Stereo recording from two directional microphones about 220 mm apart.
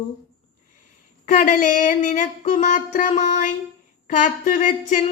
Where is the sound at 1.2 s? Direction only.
35° left (ahead or behind).